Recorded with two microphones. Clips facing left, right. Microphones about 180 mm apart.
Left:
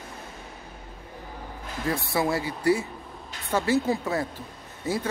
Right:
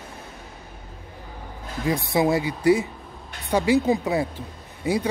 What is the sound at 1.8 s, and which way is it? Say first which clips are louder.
Speech: right 5 dB; 15° right (ahead or behind).